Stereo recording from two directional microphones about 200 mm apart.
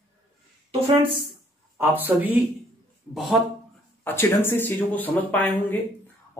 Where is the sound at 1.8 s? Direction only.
10° right (ahead or behind).